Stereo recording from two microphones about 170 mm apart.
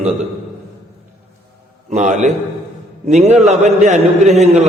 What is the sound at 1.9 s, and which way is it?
A man's voice, 45° right (ahead or behind).